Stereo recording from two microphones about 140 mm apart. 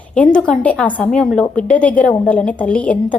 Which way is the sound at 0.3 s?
10° left (ahead or behind).